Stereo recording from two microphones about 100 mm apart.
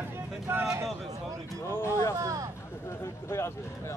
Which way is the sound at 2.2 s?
35° right (ahead or behind).